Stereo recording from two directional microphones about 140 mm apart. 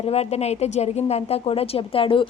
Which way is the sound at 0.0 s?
45° left (ahead or behind).